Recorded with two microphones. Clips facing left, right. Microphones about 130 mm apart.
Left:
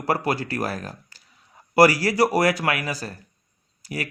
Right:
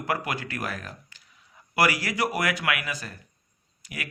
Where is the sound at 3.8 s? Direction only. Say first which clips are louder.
Left 8 dB; 35° left (ahead or behind).